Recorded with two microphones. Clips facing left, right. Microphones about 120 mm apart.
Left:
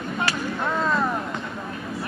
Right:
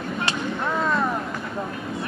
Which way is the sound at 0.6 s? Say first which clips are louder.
Even; centre (ahead or behind).